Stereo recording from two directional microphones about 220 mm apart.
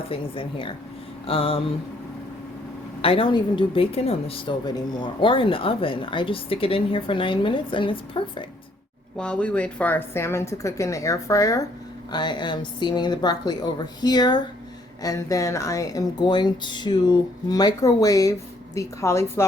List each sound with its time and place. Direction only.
0.1 s a woman's voice: 25° left (ahead or behind)
3.0 s a woman's voice: 25° left (ahead or behind)
9.1 s a woman's voice: 5° left (ahead or behind)